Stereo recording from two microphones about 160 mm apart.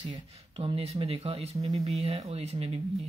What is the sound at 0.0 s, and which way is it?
Speech, 30° right (ahead or behind).